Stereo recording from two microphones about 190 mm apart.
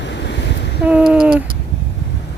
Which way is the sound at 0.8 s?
5° right (ahead or behind).